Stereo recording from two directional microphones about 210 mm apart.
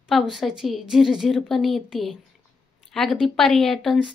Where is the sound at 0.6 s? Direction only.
Centre (ahead or behind).